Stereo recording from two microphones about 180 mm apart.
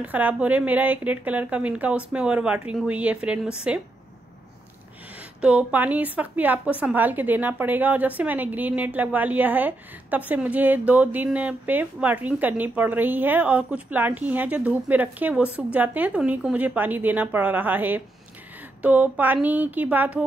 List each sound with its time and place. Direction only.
0.0 s a woman's voice: 10° right (ahead or behind)
5.4 s a woman's voice: 5° right (ahead or behind)